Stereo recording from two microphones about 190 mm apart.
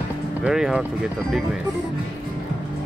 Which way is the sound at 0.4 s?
5° right (ahead or behind).